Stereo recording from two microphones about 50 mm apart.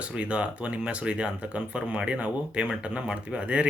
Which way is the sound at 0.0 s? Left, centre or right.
Right.